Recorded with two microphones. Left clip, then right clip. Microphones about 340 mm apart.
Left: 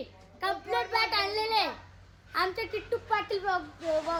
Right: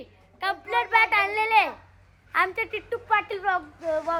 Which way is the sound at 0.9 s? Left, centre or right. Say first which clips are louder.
Right 10 dB; centre.